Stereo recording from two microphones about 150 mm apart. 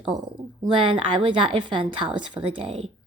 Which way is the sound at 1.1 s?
35° right (ahead or behind).